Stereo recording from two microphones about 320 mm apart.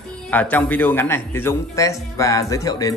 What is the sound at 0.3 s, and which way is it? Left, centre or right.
A man's voice, centre.